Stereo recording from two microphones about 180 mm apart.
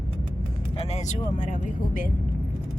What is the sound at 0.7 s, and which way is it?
Speech, 35° left (ahead or behind).